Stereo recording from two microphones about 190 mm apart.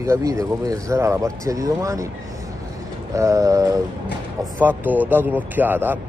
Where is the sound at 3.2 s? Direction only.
15° right (ahead or behind).